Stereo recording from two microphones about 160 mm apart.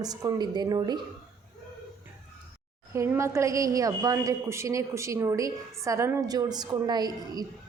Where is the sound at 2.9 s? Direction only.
15° right (ahead or behind).